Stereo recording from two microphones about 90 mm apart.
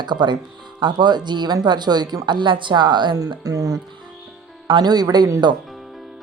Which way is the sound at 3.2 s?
45° right (ahead or behind).